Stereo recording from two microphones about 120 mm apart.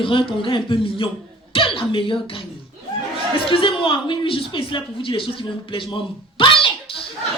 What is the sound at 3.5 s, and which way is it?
A woman's voice, 50° left (ahead or behind).